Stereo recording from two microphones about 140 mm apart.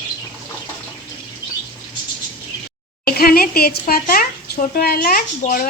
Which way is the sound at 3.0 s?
90° left.